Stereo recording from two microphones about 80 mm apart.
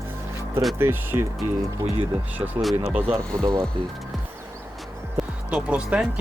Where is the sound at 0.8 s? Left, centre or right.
Right.